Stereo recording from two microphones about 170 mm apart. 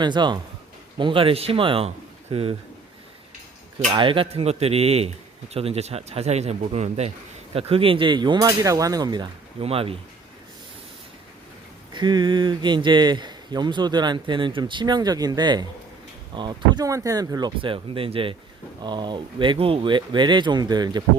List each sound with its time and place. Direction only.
0.0 s speech: 25° right (ahead or behind)
3.9 s speech: 30° right (ahead or behind)
11.9 s speech: 25° right (ahead or behind)